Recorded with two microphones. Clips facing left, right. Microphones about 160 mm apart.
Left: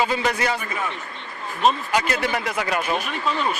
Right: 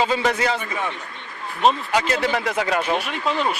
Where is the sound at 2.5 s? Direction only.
25° right (ahead or behind).